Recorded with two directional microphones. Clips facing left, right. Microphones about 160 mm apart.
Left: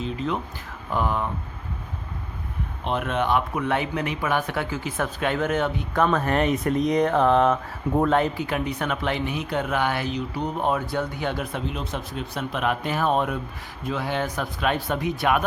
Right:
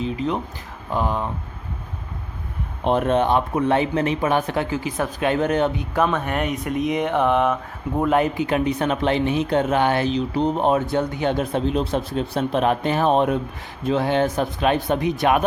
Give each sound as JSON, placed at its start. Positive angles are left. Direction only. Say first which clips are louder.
{"t": 0.0, "sound": "speech", "louder": "right 3 dB", "side_deg": -15}
{"t": 2.8, "sound": "speech", "louder": "right 6 dB", "side_deg": -40}
{"t": 6.1, "sound": "speech", "louder": "left 2 dB", "side_deg": 0}